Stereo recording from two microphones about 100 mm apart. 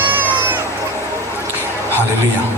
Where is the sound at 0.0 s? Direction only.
20° right (ahead or behind).